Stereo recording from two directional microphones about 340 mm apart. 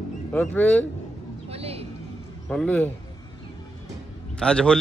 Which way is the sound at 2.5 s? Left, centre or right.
Centre.